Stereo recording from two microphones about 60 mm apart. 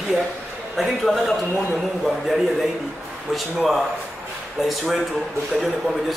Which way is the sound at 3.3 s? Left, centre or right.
Centre.